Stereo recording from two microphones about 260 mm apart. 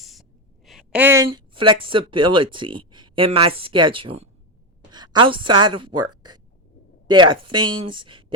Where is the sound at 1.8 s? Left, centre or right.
Centre.